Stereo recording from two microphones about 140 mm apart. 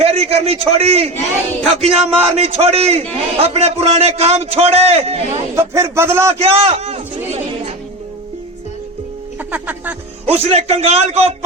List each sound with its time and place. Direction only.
0.0 s a man's voice: 45° right (ahead or behind)
5.5 s a man's voice: 20° right (ahead or behind)
6.4 s a man's voice: 45° right (ahead or behind)
9.5 s a man's voice: 10° right (ahead or behind)
10.2 s a man's voice: 45° right (ahead or behind)